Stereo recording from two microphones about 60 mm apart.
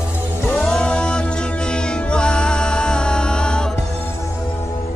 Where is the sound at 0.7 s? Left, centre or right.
Centre.